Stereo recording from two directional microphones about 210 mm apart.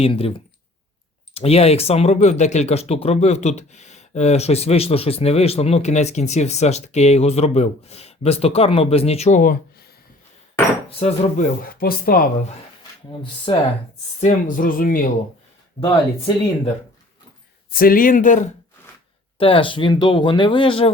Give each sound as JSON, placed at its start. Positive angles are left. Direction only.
{"t": 0.0, "sound": "speech", "side_deg": 25}
{"t": 10.8, "sound": "speech", "side_deg": 35}
{"t": 13.5, "sound": "speech", "side_deg": 25}
{"t": 14.2, "sound": "speech", "side_deg": 35}
{"t": 15.8, "sound": "speech", "side_deg": 20}
{"t": 17.7, "sound": "speech", "side_deg": 45}
{"t": 19.4, "sound": "speech", "side_deg": 25}